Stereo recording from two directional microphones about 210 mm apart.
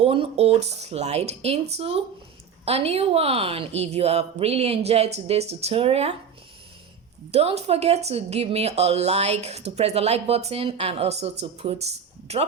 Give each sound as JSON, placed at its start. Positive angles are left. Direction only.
{"t": 0.0, "sound": "a woman's voice", "side_deg": -25}
{"t": 7.3, "sound": "a woman's voice", "side_deg": -30}